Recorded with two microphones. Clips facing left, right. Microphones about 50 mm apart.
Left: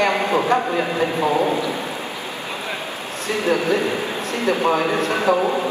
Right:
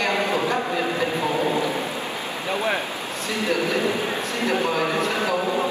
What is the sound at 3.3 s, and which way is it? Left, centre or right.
A man's voice, left.